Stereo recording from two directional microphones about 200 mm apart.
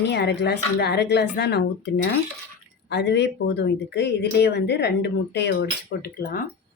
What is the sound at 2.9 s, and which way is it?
Speech, 60° left (ahead or behind).